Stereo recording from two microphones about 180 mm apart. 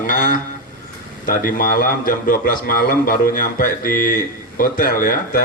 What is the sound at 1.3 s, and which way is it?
A man's voice, 50° left (ahead or behind).